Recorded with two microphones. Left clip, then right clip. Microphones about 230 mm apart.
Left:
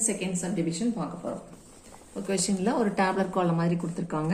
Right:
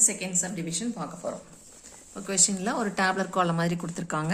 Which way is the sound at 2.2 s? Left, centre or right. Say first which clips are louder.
Right 1 dB; right.